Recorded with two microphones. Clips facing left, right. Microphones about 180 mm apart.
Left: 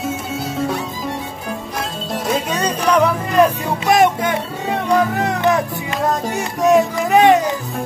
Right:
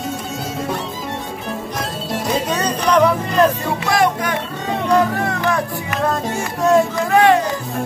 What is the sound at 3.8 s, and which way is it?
Music, 20° left (ahead or behind).